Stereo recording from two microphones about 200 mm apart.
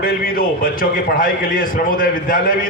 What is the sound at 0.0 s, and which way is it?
A man's voice, 45° left (ahead or behind).